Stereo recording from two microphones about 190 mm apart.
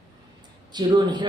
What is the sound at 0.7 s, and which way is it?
Speech, 25° right (ahead or behind).